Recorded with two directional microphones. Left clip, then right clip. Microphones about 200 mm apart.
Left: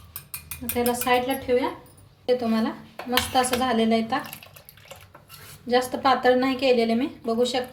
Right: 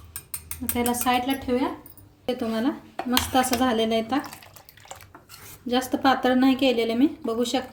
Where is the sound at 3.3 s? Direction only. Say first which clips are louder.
Right 1 dB; 45° right (ahead or behind).